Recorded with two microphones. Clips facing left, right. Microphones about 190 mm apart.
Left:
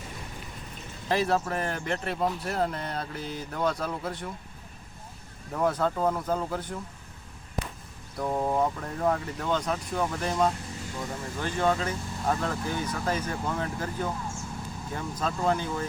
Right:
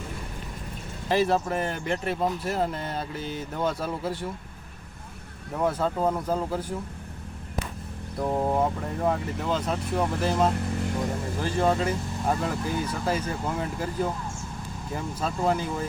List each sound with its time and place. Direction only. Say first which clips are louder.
1.0 s speech: right 3 dB; centre (ahead or behind)
5.5 s speech: right 1 dB; 5° right (ahead or behind)
8.2 s speech: right 2 dB; 10° right (ahead or behind)
11.4 s speech: right 2 dB; 30° right (ahead or behind)
11.9 s speech: right 3 dB; 15° right (ahead or behind)